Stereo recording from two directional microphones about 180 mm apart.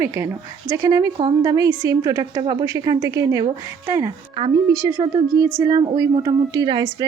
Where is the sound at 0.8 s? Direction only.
20° right (ahead or behind).